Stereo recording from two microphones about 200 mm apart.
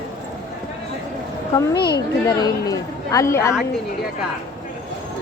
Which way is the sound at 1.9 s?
20° left (ahead or behind).